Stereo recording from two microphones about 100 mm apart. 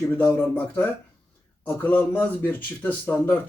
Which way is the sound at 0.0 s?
25° left (ahead or behind).